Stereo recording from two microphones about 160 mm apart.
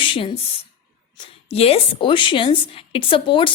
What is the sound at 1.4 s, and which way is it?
Speech, 40° left (ahead or behind).